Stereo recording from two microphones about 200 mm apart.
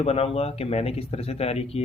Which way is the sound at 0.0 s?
30° left (ahead or behind).